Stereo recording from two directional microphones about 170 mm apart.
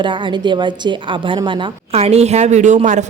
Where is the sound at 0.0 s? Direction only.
30° right (ahead or behind).